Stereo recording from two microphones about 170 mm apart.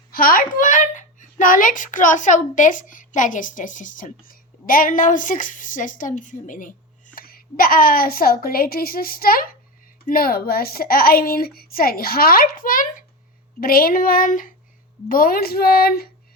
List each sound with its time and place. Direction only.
0.1 s a child's voice: 55° left (ahead or behind)